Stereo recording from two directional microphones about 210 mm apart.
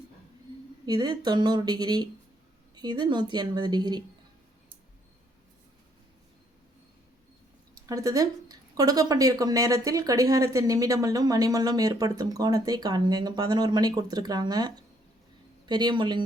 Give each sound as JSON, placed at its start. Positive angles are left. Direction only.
{"t": 0.9, "sound": "a woman's voice", "side_deg": -20}
{"t": 7.9, "sound": "a woman's voice", "side_deg": -15}